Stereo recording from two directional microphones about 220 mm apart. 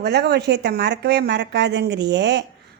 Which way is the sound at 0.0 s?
50° right (ahead or behind).